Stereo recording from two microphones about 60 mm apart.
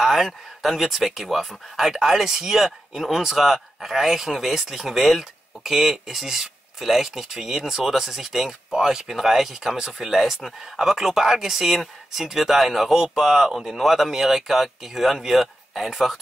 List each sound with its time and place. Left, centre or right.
0.0 s speech: centre